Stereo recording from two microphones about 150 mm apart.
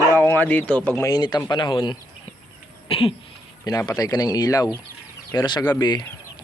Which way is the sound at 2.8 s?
40° left (ahead or behind).